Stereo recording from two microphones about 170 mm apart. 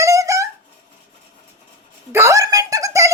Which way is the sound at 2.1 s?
15° right (ahead or behind).